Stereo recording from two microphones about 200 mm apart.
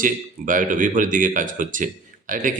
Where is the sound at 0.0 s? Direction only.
40° right (ahead or behind).